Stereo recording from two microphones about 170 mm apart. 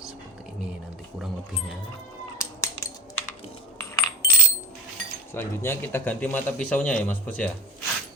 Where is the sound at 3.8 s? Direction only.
15° left (ahead or behind).